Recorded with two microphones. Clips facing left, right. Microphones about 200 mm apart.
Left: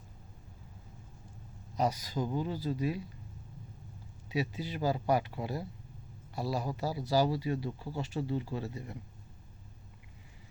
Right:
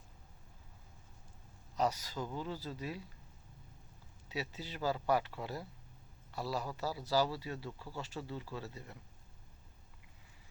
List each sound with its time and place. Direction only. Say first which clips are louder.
1.7 s speech: left 3 dB; 15° left (ahead or behind)
4.3 s speech: left 7 dB; 15° left (ahead or behind)